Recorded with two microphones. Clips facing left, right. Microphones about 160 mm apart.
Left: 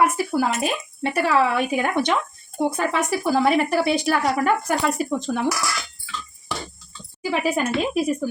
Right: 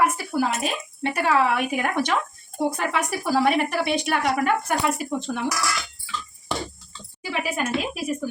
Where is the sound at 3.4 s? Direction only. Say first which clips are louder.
Left 3 dB; 35° left (ahead or behind).